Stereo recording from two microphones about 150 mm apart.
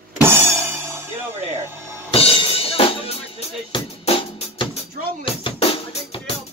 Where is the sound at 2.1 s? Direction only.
35° left (ahead or behind).